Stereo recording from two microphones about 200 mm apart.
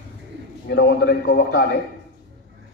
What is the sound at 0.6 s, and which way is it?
A man's voice, 50° left (ahead or behind).